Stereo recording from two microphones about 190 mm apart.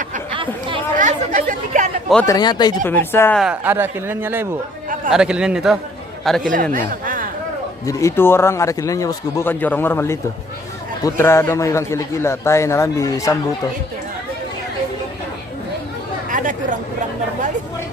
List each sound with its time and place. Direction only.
0.9 s speech: 45° right (ahead or behind)
2.2 s speech: 20° left (ahead or behind)
2.9 s a man's voice: 10° left (ahead or behind)
3.4 s a man's voice: 10° right (ahead or behind)
6.5 s a man's voice: 45° right (ahead or behind)
7.9 s a man's voice: 15° left (ahead or behind)
16.3 s chatter: 45° right (ahead or behind)